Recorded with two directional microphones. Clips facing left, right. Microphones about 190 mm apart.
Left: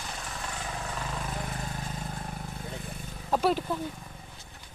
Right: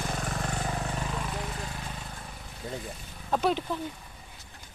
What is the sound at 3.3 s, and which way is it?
Speech, 5° left (ahead or behind).